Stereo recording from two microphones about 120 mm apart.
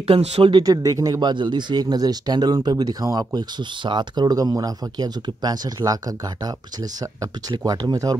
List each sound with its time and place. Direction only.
0.0 s speech: 55° right (ahead or behind)
0.7 s speech: 30° right (ahead or behind)
1.3 s speech: 40° right (ahead or behind)